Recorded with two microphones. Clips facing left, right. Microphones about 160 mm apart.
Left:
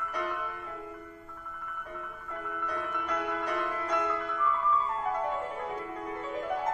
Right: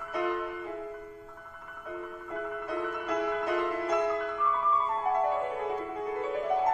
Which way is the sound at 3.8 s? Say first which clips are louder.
Right 3 dB; 35° right (ahead or behind).